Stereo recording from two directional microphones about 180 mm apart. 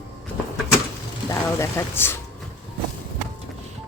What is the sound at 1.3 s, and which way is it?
Speech, 15° left (ahead or behind).